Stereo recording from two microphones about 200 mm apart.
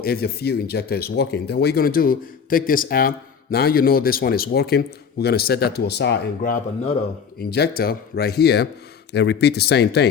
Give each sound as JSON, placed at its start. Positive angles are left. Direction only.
{"t": 0.0, "sound": "speech", "side_deg": 50}